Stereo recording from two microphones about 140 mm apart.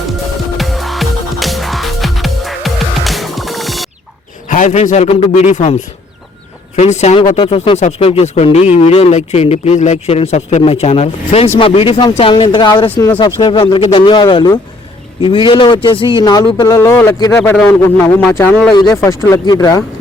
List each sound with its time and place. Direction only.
0.5 s music: centre (ahead or behind)
4.4 s a sound: 65° left (ahead or behind)
5.3 s speech: 60° left (ahead or behind)
6.7 s speech: 55° left (ahead or behind)
7.3 s a man's voice: 40° left (ahead or behind)
7.8 s a man's voice: 55° left (ahead or behind); by 18.5 s 20° left (ahead or behind)
18.7 s speech: 30° left (ahead or behind)